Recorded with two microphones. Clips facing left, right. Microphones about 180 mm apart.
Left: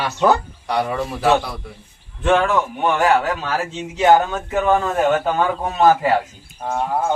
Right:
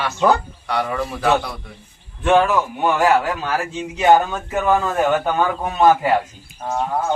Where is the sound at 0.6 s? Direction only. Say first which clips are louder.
Left 1 dB; 15° left (ahead or behind).